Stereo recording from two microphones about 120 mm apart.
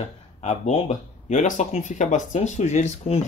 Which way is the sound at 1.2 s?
90° left.